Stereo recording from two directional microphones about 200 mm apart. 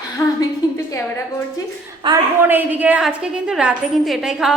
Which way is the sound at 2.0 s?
25° right (ahead or behind).